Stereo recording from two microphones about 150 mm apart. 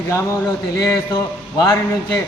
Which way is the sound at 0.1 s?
20° left (ahead or behind).